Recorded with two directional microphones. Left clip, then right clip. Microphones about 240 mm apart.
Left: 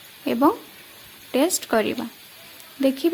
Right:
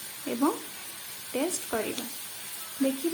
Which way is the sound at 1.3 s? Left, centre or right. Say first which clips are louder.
Left 10 dB; left.